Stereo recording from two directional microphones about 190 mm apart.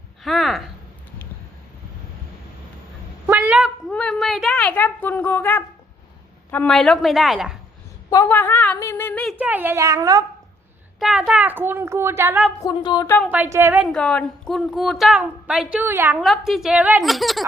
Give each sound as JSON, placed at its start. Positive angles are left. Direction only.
{"t": 0.2, "sound": "a sound", "side_deg": 0}
{"t": 3.2, "sound": "a sound", "side_deg": -10}
{"t": 6.5, "sound": "a woman's voice", "side_deg": 5}
{"t": 8.1, "sound": "a woman's voice", "side_deg": 15}
{"t": 9.3, "sound": "a woman's voice", "side_deg": -10}
{"t": 11.0, "sound": "a woman's voice", "side_deg": -5}
{"t": 12.6, "sound": "a sound", "side_deg": 20}
{"t": 13.1, "sound": "a woman's voice", "side_deg": 5}
{"t": 13.3, "sound": "a woman's voice", "side_deg": -10}
{"t": 13.8, "sound": "a woman's voice", "side_deg": 5}